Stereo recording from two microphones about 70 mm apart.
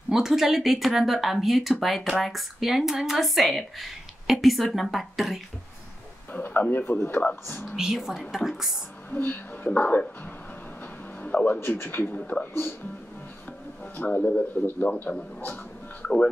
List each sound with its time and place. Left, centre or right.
0.1 s speech: centre
6.3 s speech: left
6.9 s speech: left
7.2 s speech: left
7.7 s speech: centre
9.1 s speech: left
11.2 s a man's voice: left
11.6 s speech: left
13.9 s speech: left